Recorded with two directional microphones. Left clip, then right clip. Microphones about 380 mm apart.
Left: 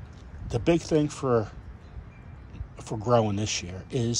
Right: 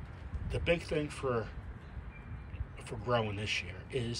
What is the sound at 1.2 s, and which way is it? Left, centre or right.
Speech, right.